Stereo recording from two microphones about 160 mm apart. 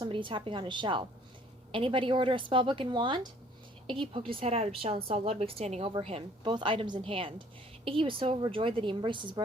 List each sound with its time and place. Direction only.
0.0 s a woman's voice: 30° right (ahead or behind)